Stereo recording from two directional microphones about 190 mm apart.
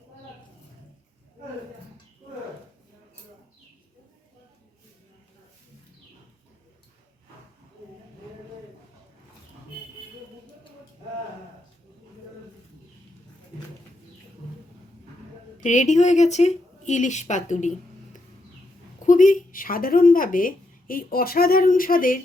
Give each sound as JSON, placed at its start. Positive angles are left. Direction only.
{"t": 15.6, "sound": "a woman's voice", "side_deg": 40}
{"t": 19.0, "sound": "speech", "side_deg": 40}